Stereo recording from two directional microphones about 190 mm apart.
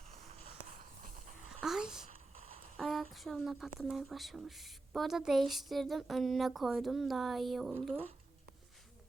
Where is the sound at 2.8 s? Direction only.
Centre (ahead or behind).